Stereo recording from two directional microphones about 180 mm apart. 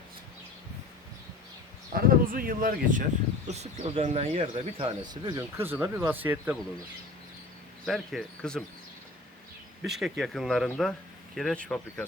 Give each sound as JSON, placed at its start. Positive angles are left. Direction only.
{"t": 1.9, "sound": "a sound", "side_deg": -55}
{"t": 2.3, "sound": "speech", "side_deg": -55}
{"t": 3.4, "sound": "speech", "side_deg": -35}
{"t": 5.5, "sound": "speech", "side_deg": -10}
{"t": 7.9, "sound": "speech", "side_deg": 0}
{"t": 9.8, "sound": "speech", "side_deg": 0}